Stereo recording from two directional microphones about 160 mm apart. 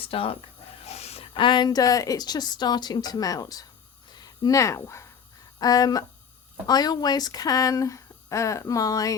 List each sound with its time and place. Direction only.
0.0 s speech: 35° left (ahead or behind)
0.8 s a sound: 40° left (ahead or behind)
1.3 s speech: 30° left (ahead or behind)